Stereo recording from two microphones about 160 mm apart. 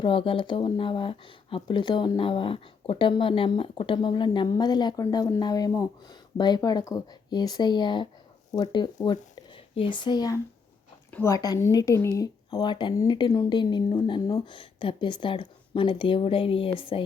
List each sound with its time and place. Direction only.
0.0 s a woman's voice: 35° left (ahead or behind)